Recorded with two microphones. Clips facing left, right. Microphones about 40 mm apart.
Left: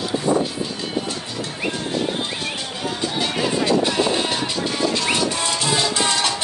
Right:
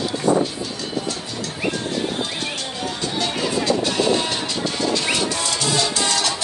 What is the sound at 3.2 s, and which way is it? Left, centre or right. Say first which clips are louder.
Music: left 1 dB; centre.